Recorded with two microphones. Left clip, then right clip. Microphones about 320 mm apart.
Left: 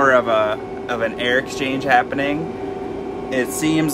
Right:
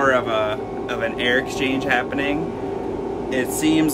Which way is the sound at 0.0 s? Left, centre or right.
Centre.